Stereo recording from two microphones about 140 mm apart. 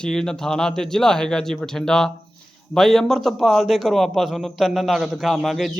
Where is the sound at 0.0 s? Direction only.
5° left (ahead or behind).